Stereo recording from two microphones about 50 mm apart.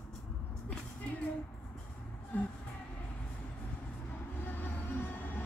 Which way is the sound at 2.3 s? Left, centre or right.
Left.